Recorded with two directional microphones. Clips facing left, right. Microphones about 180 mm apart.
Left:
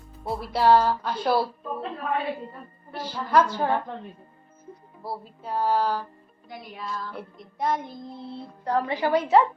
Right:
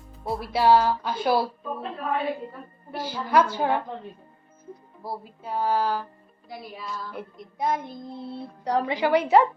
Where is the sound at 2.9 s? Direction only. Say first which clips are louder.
Even; 5° right (ahead or behind).